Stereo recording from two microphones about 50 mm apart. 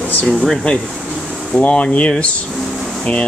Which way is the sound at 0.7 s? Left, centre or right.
Left.